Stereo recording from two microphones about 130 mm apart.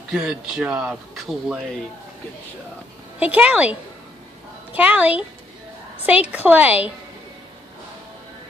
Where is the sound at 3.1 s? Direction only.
10° right (ahead or behind).